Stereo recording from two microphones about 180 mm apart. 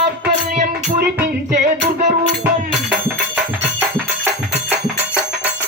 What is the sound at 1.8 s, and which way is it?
Music, 40° right (ahead or behind).